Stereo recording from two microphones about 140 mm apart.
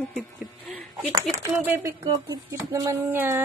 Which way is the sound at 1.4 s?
15° right (ahead or behind).